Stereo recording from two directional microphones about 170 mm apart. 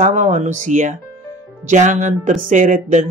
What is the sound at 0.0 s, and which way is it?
Music, 50° right (ahead or behind).